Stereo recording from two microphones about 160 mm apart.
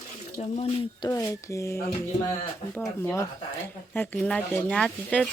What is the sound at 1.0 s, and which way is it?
Speech, 20° left (ahead or behind).